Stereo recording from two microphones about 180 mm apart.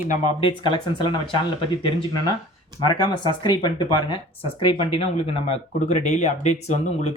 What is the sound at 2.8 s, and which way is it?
Speech, 25° left (ahead or behind).